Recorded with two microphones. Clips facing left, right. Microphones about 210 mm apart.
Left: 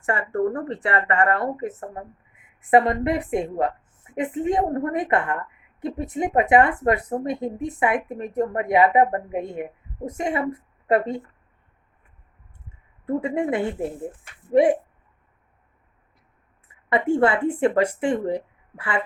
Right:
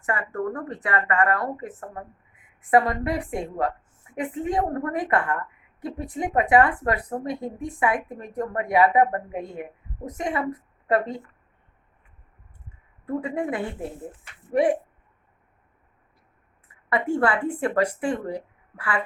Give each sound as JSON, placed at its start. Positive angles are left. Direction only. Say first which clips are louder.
{"t": 0.0, "sound": "a woman's voice", "louder": "left 5 dB", "side_deg": 30}
{"t": 13.1, "sound": "a woman's voice", "louder": "left 4 dB", "side_deg": 25}
{"t": 16.9, "sound": "a woman's voice", "louder": "left 3 dB", "side_deg": 25}